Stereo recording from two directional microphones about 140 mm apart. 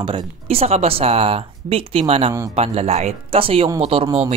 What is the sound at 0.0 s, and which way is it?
Speech, 40° right (ahead or behind).